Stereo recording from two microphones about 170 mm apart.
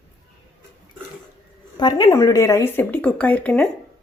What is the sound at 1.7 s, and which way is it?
Speech, 25° left (ahead or behind).